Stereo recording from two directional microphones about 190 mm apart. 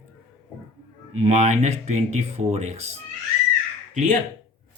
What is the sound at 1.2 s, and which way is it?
A man's voice, 35° right (ahead or behind).